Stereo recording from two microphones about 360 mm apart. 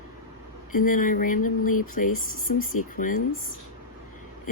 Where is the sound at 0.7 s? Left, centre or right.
Left.